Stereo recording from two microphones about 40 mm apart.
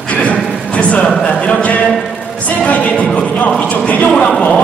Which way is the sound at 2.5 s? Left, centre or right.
Left.